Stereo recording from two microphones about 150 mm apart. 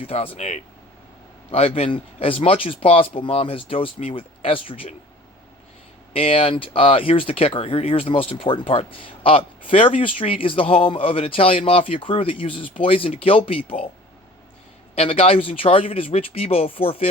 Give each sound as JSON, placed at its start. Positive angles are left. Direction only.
{"t": 0.0, "sound": "speech", "side_deg": 40}
{"t": 6.1, "sound": "speech", "side_deg": 40}
{"t": 14.9, "sound": "speech", "side_deg": 40}